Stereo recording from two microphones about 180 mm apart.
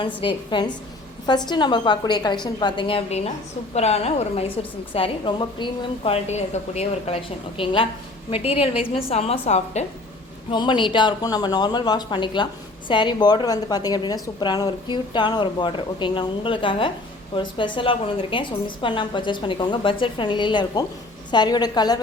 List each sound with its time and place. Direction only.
0.2 s a woman's voice: 25° left (ahead or behind)
6.3 s a woman's voice: 35° left (ahead or behind)
10.5 s a woman's voice: 25° left (ahead or behind)